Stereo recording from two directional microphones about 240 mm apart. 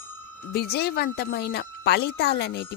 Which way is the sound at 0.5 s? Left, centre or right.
Left.